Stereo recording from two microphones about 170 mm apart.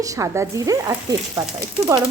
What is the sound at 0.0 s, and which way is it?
A woman's voice, 20° right (ahead or behind).